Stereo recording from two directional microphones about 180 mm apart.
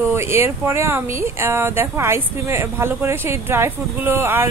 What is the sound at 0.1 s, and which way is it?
Speech, 15° right (ahead or behind).